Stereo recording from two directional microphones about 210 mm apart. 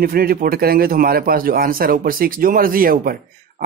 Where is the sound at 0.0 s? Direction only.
45° right (ahead or behind).